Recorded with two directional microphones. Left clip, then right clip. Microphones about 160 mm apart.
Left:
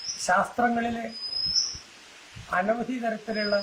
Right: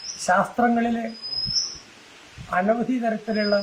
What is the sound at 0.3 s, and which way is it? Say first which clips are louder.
Speech: right 3 dB; 20° right (ahead or behind).